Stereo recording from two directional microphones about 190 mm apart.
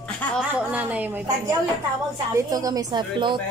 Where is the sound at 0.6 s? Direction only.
5° right (ahead or behind).